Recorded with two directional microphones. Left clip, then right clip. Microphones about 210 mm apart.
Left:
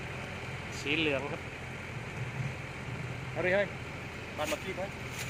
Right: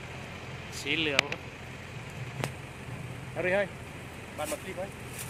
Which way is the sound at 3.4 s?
15° right (ahead or behind).